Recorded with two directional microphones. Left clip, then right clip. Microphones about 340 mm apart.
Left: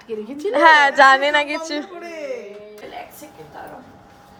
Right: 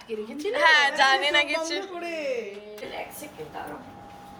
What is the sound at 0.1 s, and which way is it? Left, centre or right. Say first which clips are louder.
Speech: left 7 dB; left.